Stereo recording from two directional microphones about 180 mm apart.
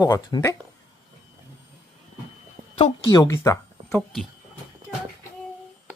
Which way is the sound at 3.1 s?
20° left (ahead or behind).